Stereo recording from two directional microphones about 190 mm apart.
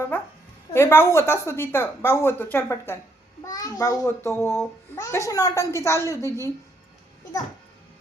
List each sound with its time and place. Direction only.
0.1 s a child's voice: 10° left (ahead or behind)